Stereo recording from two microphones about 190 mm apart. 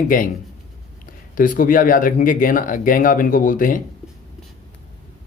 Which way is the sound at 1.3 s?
45° left (ahead or behind).